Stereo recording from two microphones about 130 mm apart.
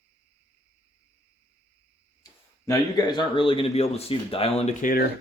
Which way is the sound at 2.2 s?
25° left (ahead or behind).